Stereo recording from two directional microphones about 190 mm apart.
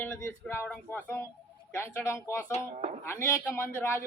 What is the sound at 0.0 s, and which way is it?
Speech, 10° left (ahead or behind).